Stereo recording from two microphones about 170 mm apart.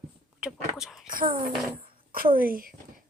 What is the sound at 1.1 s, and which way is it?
A child's voice, 55° right (ahead or behind).